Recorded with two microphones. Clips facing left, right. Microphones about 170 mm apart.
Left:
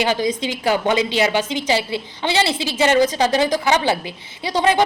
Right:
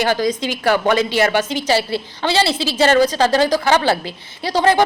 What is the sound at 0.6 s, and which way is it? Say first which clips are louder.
A woman's voice: right 2 dB; 15° left (ahead or behind).